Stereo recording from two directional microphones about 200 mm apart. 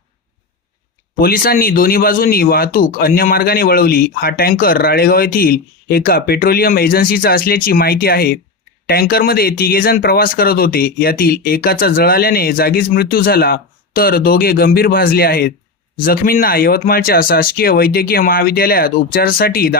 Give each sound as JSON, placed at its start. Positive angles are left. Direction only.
{"t": 1.2, "sound": "speech", "side_deg": 45}